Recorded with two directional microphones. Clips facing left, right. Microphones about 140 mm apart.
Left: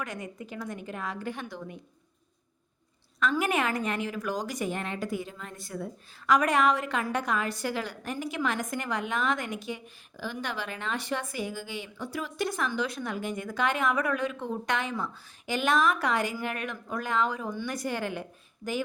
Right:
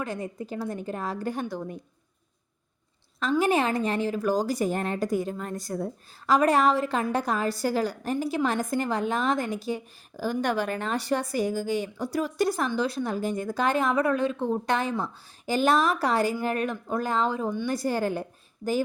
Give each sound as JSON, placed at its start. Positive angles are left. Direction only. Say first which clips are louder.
{"t": 0.0, "sound": "a woman's voice", "louder": "right 5 dB", "side_deg": -30}
{"t": 3.2, "sound": "a woman's voice", "louder": "right 4 dB", "side_deg": -30}